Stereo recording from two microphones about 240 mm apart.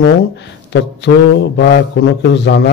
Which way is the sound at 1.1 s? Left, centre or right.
Left.